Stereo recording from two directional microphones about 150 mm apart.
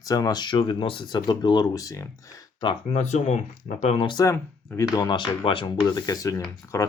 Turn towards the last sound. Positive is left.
turn(degrees=20)  # may be behind; listen again after turning